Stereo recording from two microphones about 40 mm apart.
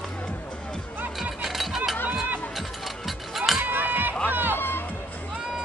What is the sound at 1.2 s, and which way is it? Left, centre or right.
Music, centre.